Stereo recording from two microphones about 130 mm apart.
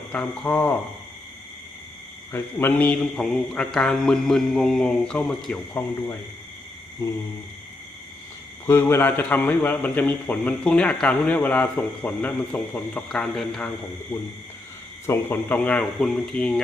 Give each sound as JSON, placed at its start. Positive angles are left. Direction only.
{"t": 0.1, "sound": "a man's voice", "side_deg": 10}
{"t": 2.3, "sound": "a man's voice", "side_deg": 15}
{"t": 7.0, "sound": "a sound", "side_deg": 25}
{"t": 8.6, "sound": "a man's voice", "side_deg": 20}
{"t": 15.0, "sound": "a man's voice", "side_deg": 15}